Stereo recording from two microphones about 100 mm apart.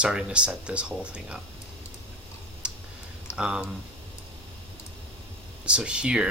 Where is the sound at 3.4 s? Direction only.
10° right (ahead or behind).